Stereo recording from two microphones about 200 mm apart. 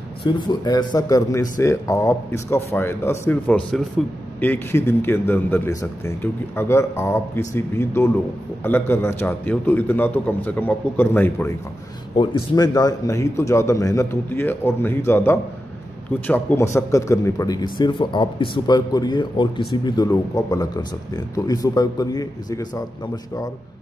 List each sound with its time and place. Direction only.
0.2 s a man's voice: 20° left (ahead or behind)